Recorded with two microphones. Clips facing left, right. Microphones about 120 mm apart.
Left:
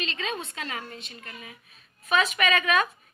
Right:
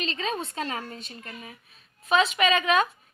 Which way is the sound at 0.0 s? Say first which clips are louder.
Right 2 dB; 35° right (ahead or behind).